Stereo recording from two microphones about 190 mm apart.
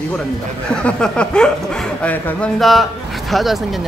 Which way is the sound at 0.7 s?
5° left (ahead or behind).